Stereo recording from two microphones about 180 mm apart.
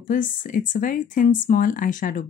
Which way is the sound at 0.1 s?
45° left (ahead or behind).